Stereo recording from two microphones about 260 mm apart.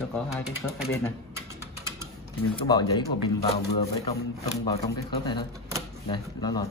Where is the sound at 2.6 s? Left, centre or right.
Centre.